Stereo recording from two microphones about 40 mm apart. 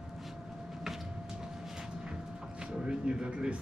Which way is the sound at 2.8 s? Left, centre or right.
Right.